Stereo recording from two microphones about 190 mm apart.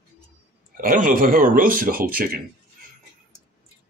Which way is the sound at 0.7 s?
45° right (ahead or behind).